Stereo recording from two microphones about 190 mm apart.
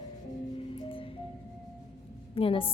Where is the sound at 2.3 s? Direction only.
30° left (ahead or behind).